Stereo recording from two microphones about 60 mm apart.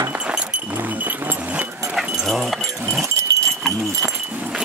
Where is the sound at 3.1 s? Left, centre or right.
Right.